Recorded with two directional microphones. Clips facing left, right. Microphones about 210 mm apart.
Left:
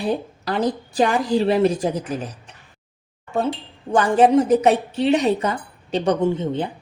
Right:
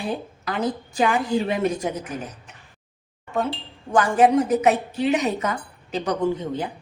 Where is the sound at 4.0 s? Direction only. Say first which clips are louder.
Left 2 dB; 30° left (ahead or behind).